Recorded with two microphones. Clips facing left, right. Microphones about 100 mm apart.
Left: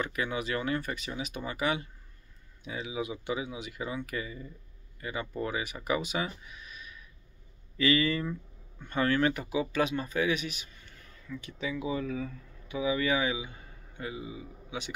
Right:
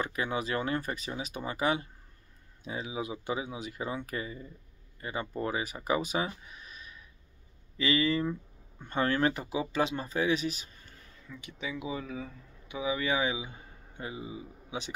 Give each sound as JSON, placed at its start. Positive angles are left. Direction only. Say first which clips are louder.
{"t": 0.0, "sound": "speech", "louder": "even", "side_deg": -30}
{"t": 5.9, "sound": "a sound", "louder": "right 1 dB", "side_deg": -35}
{"t": 7.7, "sound": "speech", "louder": "left 1 dB", "side_deg": -25}
{"t": 11.2, "sound": "speech", "louder": "left 3 dB", "side_deg": -15}